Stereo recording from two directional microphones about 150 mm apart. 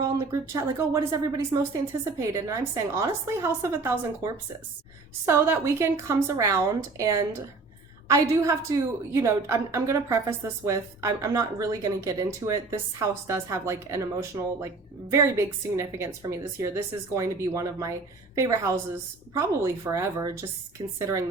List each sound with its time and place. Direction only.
0.0 s a woman's voice: 20° right (ahead or behind)
20.8 s speech: 30° right (ahead or behind)